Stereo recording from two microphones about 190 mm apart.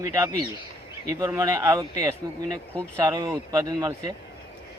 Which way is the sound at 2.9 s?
15° right (ahead or behind).